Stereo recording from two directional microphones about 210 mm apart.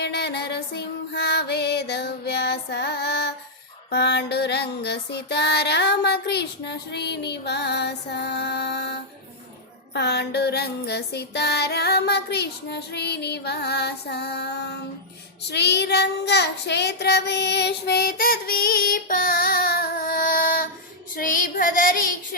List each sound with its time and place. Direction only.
0.0 s child singing: 50° left (ahead or behind)